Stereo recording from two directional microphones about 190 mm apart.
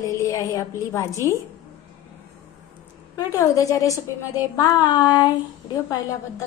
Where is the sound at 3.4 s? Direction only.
15° left (ahead or behind).